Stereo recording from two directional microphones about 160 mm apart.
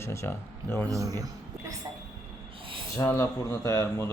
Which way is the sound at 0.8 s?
20° right (ahead or behind).